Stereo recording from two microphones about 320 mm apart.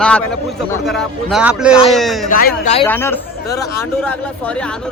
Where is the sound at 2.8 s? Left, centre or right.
Centre.